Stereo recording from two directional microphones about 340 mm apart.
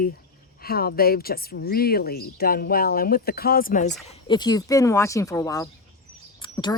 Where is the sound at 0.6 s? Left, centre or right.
Left.